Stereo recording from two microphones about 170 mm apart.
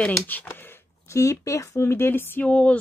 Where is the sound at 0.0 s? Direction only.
10° left (ahead or behind).